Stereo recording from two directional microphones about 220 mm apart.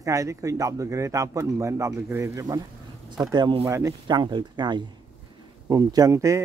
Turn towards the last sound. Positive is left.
turn(degrees=-15)  # may be behind; listen again after turning